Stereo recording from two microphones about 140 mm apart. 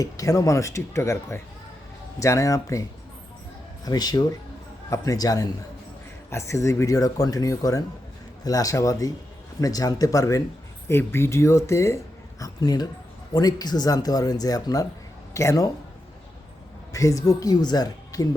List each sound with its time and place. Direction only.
0.0 s speech: 25° left (ahead or behind)
3.8 s speech: 30° left (ahead or behind)
16.9 s speech: 25° left (ahead or behind)